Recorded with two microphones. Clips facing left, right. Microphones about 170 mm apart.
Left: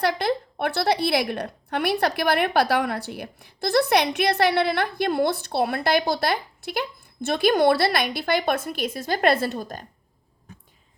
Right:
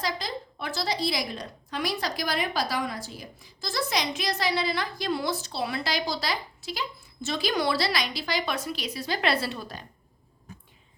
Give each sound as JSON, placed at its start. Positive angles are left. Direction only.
{"t": 0.0, "sound": "a woman's voice", "side_deg": 65}